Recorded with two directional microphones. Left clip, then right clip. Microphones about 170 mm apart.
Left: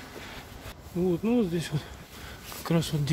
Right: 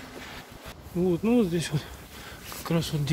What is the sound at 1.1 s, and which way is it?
Speech, 5° right (ahead or behind).